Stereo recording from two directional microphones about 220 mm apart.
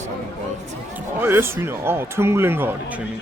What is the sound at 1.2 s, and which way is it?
A man's voice, 10° right (ahead or behind).